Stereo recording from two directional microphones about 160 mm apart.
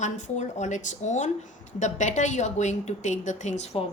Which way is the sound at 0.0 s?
50° left (ahead or behind).